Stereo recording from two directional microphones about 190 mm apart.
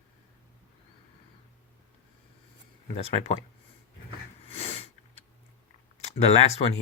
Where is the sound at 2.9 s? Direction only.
30° left (ahead or behind).